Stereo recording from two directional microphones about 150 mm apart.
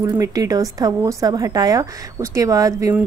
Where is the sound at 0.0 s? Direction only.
20° right (ahead or behind).